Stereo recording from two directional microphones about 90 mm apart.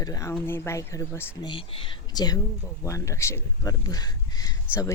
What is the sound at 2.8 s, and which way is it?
Speech, 35° left (ahead or behind).